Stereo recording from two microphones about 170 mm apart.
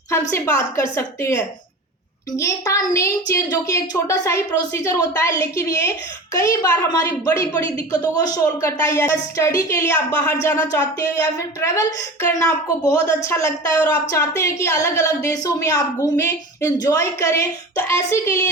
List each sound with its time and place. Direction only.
0.1 s a woman's voice: 15° left (ahead or behind)